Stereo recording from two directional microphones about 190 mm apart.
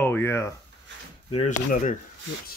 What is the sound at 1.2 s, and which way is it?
Speech, 30° left (ahead or behind).